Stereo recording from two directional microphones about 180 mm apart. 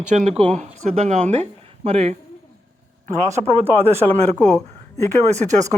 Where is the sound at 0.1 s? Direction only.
40° right (ahead or behind).